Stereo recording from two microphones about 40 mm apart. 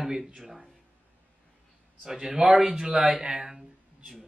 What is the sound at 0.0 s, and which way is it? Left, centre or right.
Speech, centre.